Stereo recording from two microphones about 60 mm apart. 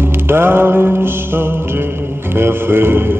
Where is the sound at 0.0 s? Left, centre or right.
Right.